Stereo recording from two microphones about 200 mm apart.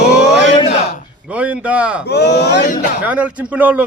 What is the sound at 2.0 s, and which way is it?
Speech, 55° left (ahead or behind).